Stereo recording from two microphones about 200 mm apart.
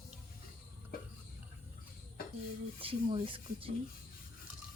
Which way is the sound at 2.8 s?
25° right (ahead or behind).